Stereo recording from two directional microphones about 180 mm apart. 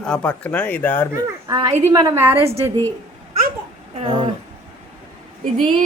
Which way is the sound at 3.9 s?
30° right (ahead or behind).